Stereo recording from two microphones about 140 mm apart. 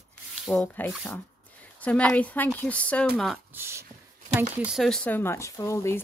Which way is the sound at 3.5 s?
15° right (ahead or behind).